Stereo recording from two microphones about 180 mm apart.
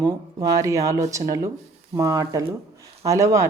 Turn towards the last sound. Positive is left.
turn(degrees=-15)  # may be behind; listen again after turning